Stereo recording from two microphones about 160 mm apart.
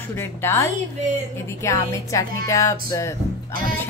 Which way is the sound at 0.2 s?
15° left (ahead or behind).